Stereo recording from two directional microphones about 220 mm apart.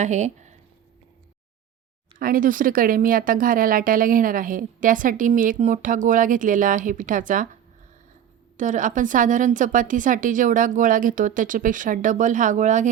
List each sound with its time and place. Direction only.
0.0 s speech: 30° right (ahead or behind)
2.1 s speech: 40° right (ahead or behind)
8.5 s speech: 35° right (ahead or behind)